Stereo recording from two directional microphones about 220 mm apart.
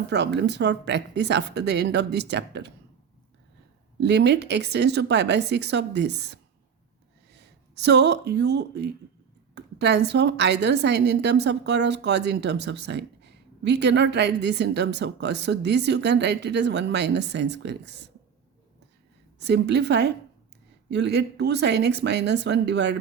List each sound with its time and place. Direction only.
0.1 s a woman's voice: 50° right (ahead or behind)
4.0 s a woman's voice: 50° right (ahead or behind)
19.4 s a woman's voice: 50° right (ahead or behind)